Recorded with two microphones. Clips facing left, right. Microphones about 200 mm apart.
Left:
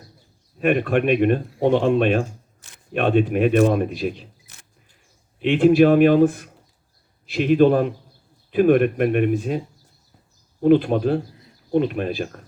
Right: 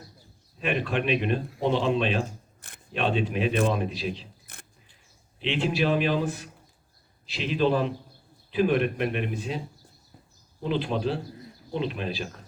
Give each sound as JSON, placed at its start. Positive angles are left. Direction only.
{"t": 0.6, "sound": "a man's voice", "side_deg": 50}
{"t": 2.6, "sound": "camera", "side_deg": -55}
{"t": 2.9, "sound": "a man's voice", "side_deg": 50}
{"t": 4.5, "sound": "vehicle", "side_deg": -55}
{"t": 5.4, "sound": "a man's voice", "side_deg": 50}
{"t": 10.6, "sound": "a man's voice", "side_deg": 50}